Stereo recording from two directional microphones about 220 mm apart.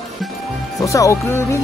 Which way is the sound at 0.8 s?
15° left (ahead or behind).